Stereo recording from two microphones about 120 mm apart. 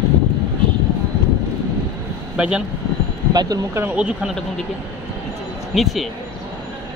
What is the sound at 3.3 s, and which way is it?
Speech, 35° right (ahead or behind).